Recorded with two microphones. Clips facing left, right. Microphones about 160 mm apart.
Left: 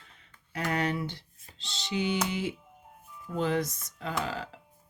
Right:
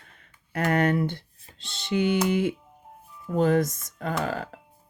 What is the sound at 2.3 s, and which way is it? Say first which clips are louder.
Speech: right 8 dB; 55° right (ahead or behind).